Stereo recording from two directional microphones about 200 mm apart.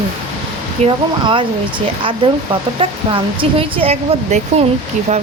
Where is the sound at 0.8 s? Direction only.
25° right (ahead or behind).